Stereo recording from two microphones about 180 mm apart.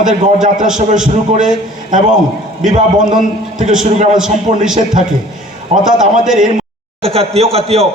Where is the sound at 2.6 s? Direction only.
45° right (ahead or behind).